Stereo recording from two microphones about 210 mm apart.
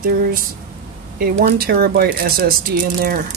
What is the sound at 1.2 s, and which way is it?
Speech, 45° right (ahead or behind).